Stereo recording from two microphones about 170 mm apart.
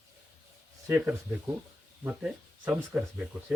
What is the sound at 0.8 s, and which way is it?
Speech, 5° right (ahead or behind).